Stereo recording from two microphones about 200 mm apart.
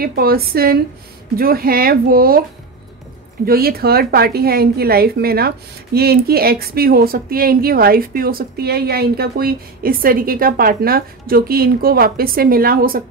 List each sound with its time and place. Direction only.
0.0 s a woman's voice: 50° right (ahead or behind)
3.4 s a woman's voice: 50° right (ahead or behind)